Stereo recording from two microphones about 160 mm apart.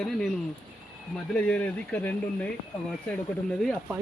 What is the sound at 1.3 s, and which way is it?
Speech, 10° left (ahead or behind).